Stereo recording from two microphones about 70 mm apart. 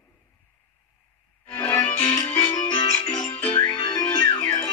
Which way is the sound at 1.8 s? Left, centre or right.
Left.